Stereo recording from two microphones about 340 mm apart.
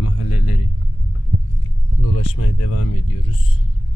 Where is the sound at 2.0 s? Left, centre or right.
Left.